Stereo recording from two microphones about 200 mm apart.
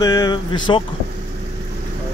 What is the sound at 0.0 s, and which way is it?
Speech, 20° left (ahead or behind).